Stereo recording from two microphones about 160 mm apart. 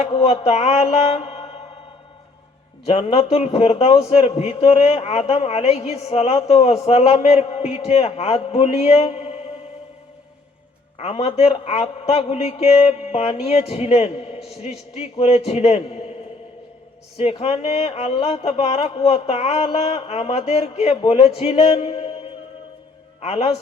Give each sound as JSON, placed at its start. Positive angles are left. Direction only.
{"t": 0.0, "sound": "a man's voice", "side_deg": 40}
{"t": 2.8, "sound": "a man's voice", "side_deg": 40}
{"t": 10.9, "sound": "a man's voice", "side_deg": 40}
{"t": 17.2, "sound": "a man's voice", "side_deg": 40}